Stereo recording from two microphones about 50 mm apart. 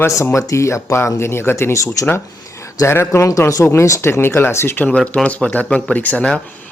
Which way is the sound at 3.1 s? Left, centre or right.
Left.